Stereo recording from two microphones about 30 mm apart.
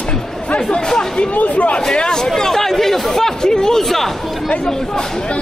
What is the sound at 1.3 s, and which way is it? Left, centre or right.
Speech, left.